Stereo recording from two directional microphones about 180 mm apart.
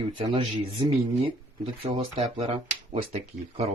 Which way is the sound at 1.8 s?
35° right (ahead or behind).